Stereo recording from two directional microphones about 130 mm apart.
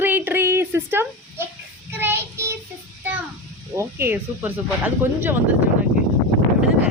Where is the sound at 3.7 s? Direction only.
20° right (ahead or behind).